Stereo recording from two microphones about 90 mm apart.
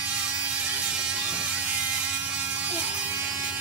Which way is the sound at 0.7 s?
10° right (ahead or behind).